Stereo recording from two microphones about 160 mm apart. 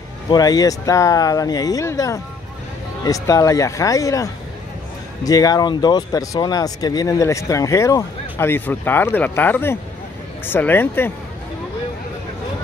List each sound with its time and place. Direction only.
0.3 s speech: 25° left (ahead or behind)